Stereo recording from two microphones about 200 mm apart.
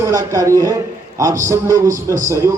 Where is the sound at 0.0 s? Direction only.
15° right (ahead or behind).